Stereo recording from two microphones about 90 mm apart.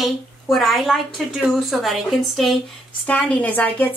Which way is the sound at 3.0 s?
20° left (ahead or behind).